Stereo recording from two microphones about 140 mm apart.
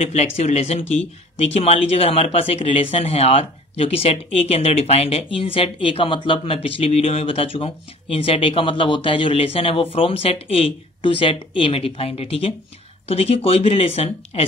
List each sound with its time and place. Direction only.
0.0 s speech: 50° left (ahead or behind)